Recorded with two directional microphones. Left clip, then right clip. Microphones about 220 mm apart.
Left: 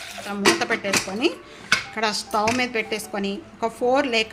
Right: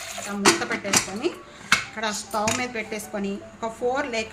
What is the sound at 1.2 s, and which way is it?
A woman's voice, 40° left (ahead or behind).